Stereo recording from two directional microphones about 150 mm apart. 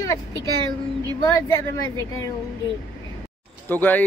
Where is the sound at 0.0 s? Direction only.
20° left (ahead or behind).